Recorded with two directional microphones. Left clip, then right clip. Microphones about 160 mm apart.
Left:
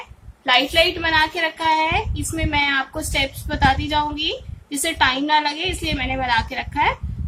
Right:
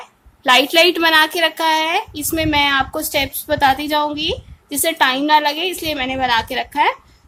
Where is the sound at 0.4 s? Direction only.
60° right (ahead or behind).